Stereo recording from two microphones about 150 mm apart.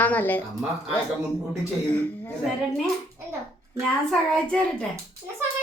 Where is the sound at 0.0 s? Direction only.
10° left (ahead or behind).